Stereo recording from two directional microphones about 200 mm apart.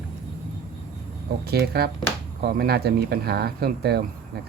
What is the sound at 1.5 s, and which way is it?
Speech, 50° right (ahead or behind).